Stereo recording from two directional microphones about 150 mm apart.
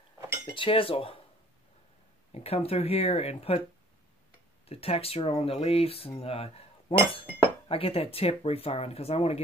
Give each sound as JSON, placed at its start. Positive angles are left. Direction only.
{"t": 0.6, "sound": "speech", "side_deg": 35}
{"t": 2.3, "sound": "speech", "side_deg": 40}
{"t": 4.6, "sound": "speech", "side_deg": 40}